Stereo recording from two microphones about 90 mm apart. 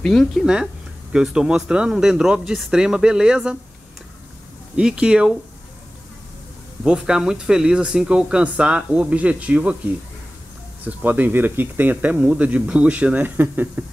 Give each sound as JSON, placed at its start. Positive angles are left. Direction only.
{"t": 0.0, "sound": "speech", "side_deg": 5}
{"t": 4.7, "sound": "speech", "side_deg": -10}
{"t": 6.8, "sound": "speech", "side_deg": -10}
{"t": 10.8, "sound": "speech", "side_deg": -20}